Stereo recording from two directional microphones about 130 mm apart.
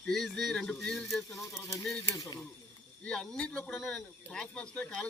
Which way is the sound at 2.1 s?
25° left (ahead or behind).